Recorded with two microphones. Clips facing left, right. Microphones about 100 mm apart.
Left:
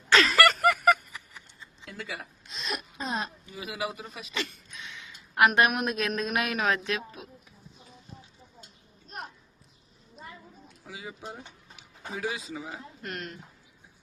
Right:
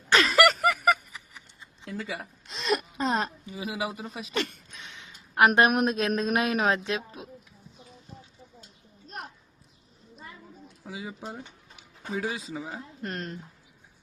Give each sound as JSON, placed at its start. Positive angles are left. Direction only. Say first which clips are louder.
{"t": 0.3, "sound": "a sound", "louder": "right 1 dB", "side_deg": -5}
{"t": 1.8, "sound": "speech", "louder": "right 4 dB", "side_deg": -30}
{"t": 2.5, "sound": "speech", "louder": "right 9 dB", "side_deg": -65}
{"t": 3.4, "sound": "a man's voice", "louder": "right 2 dB", "side_deg": -25}
{"t": 4.4, "sound": "a woman's voice", "louder": "right 4 dB", "side_deg": -50}
{"t": 10.8, "sound": "speech", "louder": "right 3 dB", "side_deg": -30}